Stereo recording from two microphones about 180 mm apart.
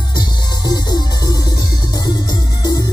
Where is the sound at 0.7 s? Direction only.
20° left (ahead or behind).